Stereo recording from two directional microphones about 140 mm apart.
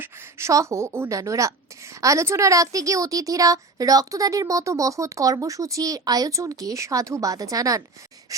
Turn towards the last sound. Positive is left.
turn(degrees=-25)  # may be behind; listen again after turning